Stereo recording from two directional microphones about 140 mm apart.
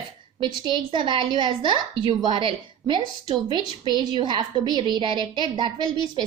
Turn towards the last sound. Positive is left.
turn(degrees=-30)  # may be behind; listen again after turning